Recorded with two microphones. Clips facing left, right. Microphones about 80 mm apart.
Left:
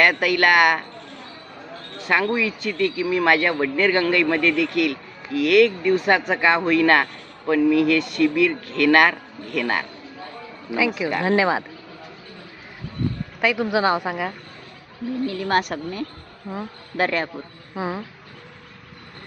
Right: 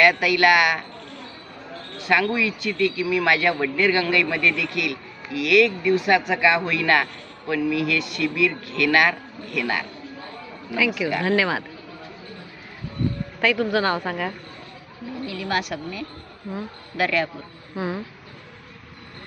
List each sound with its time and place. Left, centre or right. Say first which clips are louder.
0.0 s speech: right 1 dB; left
2.0 s speech: even; left
10.7 s speech: left 1 dB; left
13.4 s a woman's voice: left 1 dB; centre
15.3 s speech: left 2 dB; left
17.7 s a woman's voice: left 1 dB; centre